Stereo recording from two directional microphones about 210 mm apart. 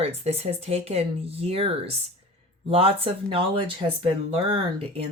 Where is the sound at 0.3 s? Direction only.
30° right (ahead or behind).